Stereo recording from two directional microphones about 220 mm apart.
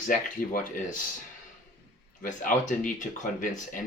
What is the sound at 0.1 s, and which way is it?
Speech, 35° left (ahead or behind).